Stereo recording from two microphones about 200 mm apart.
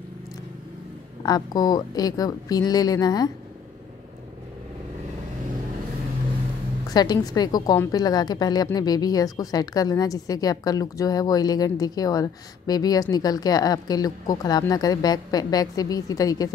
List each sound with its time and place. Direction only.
1.2 s a woman's voice: 20° left (ahead or behind)
6.9 s a woman's voice: 20° left (ahead or behind)